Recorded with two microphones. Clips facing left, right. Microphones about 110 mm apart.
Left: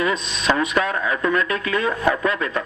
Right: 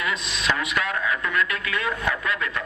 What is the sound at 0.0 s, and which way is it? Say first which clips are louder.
Speech: left 5 dB; 35° left (ahead or behind).